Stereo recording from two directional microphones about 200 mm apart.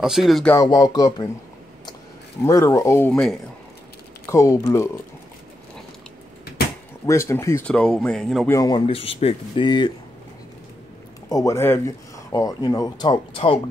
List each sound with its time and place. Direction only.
0.0 s speech: centre (ahead or behind)
0.6 s speech: 20° left (ahead or behind)
2.4 s speech: 15° left (ahead or behind)
4.3 s speech: 15° left (ahead or behind)
7.1 s speech: 15° left (ahead or behind)
8.5 s speech: 20° left (ahead or behind)
11.2 s speech: 15° left (ahead or behind)